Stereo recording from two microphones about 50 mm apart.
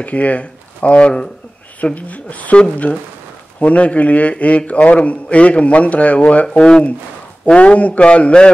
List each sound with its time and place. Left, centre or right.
0.0 s a man's voice: left